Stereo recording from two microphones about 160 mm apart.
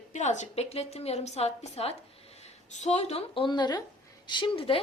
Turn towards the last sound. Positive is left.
turn(degrees=35)  # may be behind; listen again after turning